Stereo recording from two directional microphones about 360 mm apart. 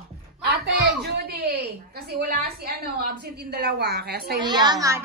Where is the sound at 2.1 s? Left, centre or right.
Right.